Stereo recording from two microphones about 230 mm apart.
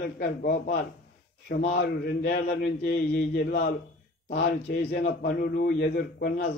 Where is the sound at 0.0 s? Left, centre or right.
Left.